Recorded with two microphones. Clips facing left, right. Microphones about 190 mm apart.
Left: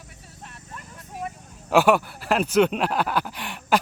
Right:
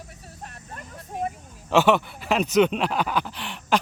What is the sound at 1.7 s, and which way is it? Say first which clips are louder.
Speech: left 1 dB; 10° left (ahead or behind).